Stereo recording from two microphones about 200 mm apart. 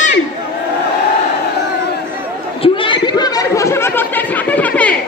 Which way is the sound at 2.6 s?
25° left (ahead or behind).